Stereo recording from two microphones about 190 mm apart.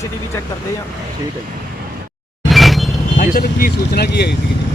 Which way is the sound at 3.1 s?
45° left (ahead or behind).